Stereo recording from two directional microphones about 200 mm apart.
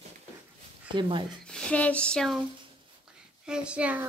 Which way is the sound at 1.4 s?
5° left (ahead or behind).